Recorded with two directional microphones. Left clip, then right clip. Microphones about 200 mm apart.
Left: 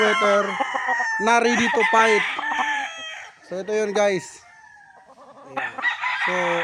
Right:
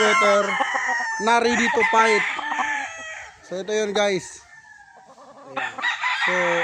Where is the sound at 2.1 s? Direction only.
35° left (ahead or behind).